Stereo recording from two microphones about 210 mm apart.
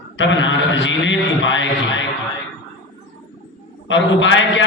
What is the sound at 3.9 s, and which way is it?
Speech, 60° left (ahead or behind).